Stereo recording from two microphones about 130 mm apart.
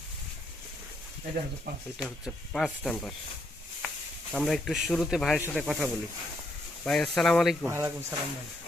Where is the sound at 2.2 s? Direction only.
Centre (ahead or behind).